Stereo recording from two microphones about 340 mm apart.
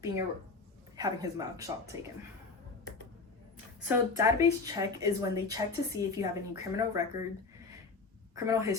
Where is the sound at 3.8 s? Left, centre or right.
Centre.